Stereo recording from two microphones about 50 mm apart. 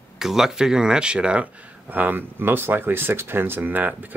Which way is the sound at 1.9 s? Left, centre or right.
Right.